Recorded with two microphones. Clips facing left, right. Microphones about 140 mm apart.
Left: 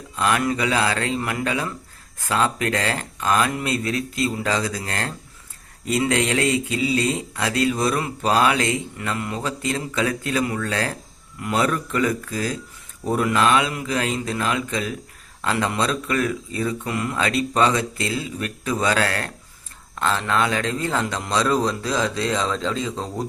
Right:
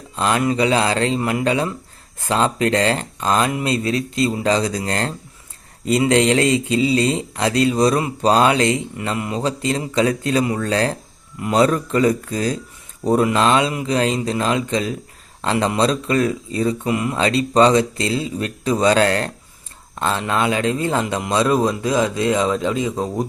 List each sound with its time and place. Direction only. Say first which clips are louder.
0.2 s speech: right 3 dB; 25° right (ahead or behind)
17.2 s speech: right 6 dB; 30° right (ahead or behind)
20.0 s speech: right 1 dB; 20° right (ahead or behind)